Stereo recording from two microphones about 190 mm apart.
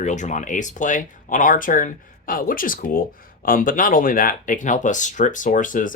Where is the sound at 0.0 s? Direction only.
40° left (ahead or behind).